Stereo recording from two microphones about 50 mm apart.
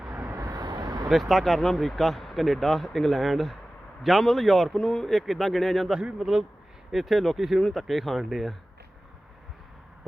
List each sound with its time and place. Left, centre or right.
0.1 s vehicle: right
1.1 s speech: centre
4.7 s speech: centre
5.9 s a man's voice: centre